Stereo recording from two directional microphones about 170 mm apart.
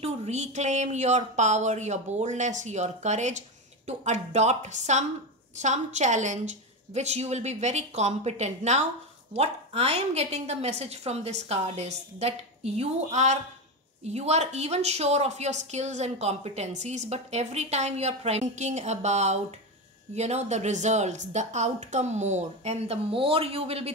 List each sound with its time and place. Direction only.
0.0 s a woman's voice: 40° right (ahead or behind)